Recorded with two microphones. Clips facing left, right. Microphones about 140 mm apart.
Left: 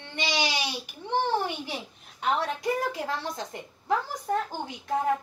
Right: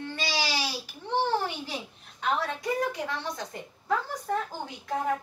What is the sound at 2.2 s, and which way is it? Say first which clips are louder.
A woman's voice: left 2 dB; 25° left (ahead or behind).